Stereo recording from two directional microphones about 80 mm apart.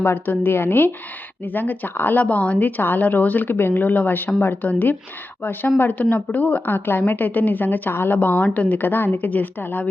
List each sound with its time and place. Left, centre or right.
0.0 s speech: left